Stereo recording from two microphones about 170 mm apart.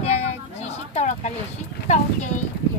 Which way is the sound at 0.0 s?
35° left (ahead or behind).